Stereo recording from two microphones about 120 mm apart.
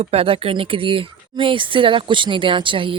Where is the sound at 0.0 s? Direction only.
55° right (ahead or behind).